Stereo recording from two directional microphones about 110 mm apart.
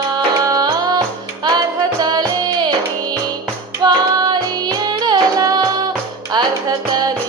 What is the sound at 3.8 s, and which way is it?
Music, 40° right (ahead or behind).